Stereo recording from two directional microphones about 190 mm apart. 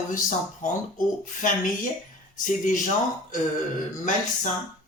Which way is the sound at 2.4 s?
45° left (ahead or behind).